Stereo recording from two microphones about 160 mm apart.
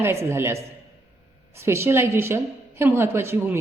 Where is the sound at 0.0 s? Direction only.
15° right (ahead or behind).